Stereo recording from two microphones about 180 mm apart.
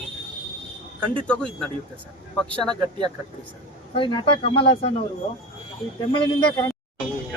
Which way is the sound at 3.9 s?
25° left (ahead or behind).